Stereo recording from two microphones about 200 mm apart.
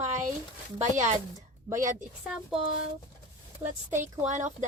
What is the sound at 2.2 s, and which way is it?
Speech, 5° right (ahead or behind).